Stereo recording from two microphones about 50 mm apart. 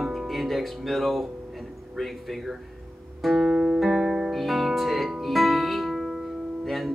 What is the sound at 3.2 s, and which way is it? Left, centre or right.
Music, centre.